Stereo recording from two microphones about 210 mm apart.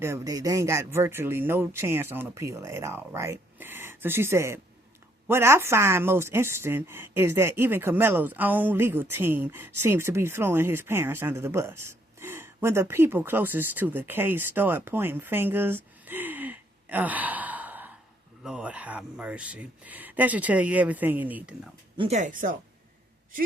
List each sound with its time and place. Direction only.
0.0 s a woman's voice: 15° right (ahead or behind)
21.9 s speech: 30° right (ahead or behind)